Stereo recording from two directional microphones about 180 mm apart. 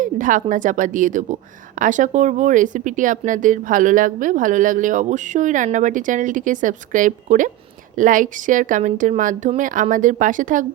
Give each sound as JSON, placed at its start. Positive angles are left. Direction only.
{"t": 0.0, "sound": "speech", "side_deg": -45}